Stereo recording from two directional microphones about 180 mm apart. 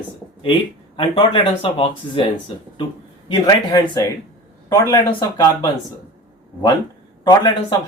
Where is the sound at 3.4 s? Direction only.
25° left (ahead or behind).